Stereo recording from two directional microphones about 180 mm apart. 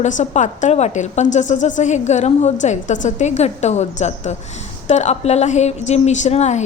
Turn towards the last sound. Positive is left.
turn(degrees=40)  # may be behind; listen again after turning